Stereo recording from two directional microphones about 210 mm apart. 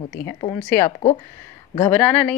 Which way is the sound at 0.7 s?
10° left (ahead or behind).